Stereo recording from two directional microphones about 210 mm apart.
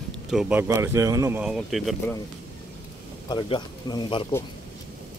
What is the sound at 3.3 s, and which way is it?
Speech, 20° left (ahead or behind).